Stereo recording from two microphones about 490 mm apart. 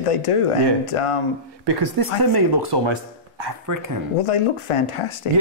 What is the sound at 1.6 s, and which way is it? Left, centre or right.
Speech, right.